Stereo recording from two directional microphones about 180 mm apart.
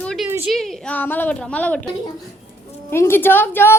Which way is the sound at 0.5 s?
Centre (ahead or behind).